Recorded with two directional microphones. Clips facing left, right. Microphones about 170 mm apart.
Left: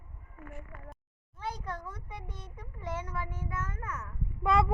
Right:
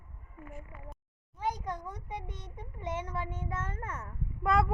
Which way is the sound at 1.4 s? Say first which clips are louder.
Right 3 dB; 15° right (ahead or behind).